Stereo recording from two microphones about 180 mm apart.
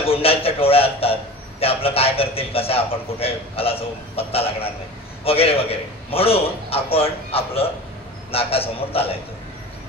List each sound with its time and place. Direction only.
0.0 s a man's voice: 35° left (ahead or behind)